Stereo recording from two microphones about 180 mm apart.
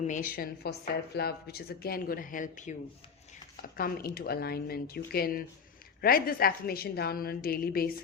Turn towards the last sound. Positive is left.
turn(degrees=55)  # may be behind; listen again after turning